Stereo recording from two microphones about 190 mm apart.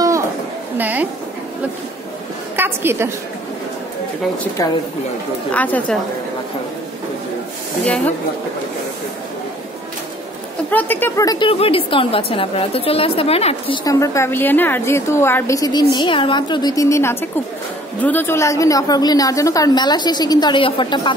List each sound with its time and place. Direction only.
0.7 s a sound: 10° right (ahead or behind)
2.5 s a woman's voice: 10° right (ahead or behind)
5.5 s a woman's voice: 10° left (ahead or behind)
10.7 s a woman's voice: 10° left (ahead or behind); by 13.7 s 30° left (ahead or behind)
13.8 s a woman's voice: 15° left (ahead or behind)